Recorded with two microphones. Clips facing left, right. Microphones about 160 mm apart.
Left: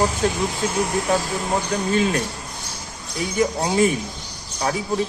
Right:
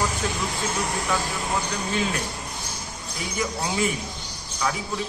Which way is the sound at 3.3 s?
40° left (ahead or behind).